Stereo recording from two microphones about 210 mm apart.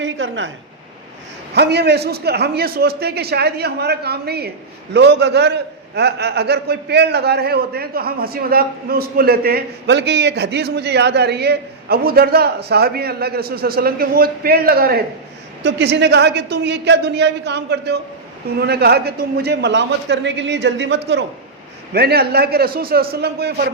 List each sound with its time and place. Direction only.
0.0 s a woman's voice: 60° right (ahead or behind)
1.5 s a man's voice: 50° right (ahead or behind)